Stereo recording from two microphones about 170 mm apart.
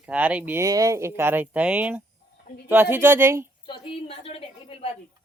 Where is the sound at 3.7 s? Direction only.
30° left (ahead or behind).